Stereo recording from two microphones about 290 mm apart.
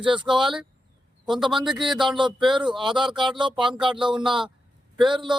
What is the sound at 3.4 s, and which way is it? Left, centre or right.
Speech, centre.